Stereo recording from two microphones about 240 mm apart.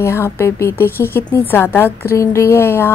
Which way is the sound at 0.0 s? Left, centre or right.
Centre.